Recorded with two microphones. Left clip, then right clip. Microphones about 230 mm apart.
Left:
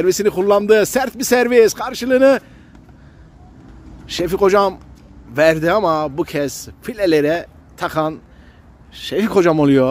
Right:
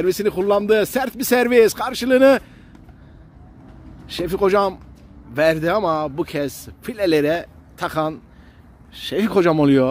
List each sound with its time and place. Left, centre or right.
0.0 s a man's voice: centre
4.0 s a man's voice: centre